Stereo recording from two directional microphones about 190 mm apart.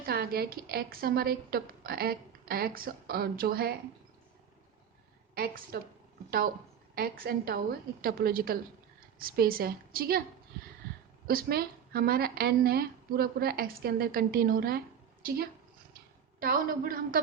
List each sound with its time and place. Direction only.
0.0 s speech: 50° right (ahead or behind)
5.3 s speech: 50° right (ahead or behind)
6.9 s speech: 50° right (ahead or behind)
11.3 s speech: 50° right (ahead or behind)
16.4 s speech: 50° right (ahead or behind)